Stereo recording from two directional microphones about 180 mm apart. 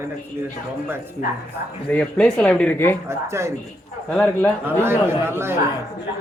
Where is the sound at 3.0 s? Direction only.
15° right (ahead or behind).